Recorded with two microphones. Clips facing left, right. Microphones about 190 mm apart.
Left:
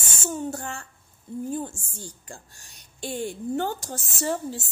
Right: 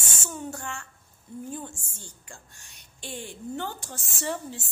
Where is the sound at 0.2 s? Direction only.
40° left (ahead or behind).